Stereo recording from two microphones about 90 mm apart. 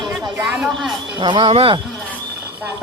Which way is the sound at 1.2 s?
65° right (ahead or behind).